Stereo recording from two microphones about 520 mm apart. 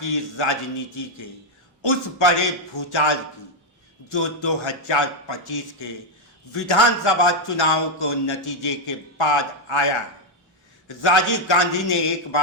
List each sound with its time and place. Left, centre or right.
0.0 s a man's voice: left
1.8 s a man's voice: left
2.7 s a man's voice: left